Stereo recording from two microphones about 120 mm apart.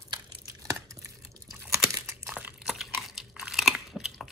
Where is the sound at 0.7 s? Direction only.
25° right (ahead or behind).